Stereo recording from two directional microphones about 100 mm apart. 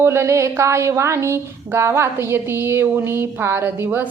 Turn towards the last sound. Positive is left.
turn(degrees=-25)  # may be behind; listen again after turning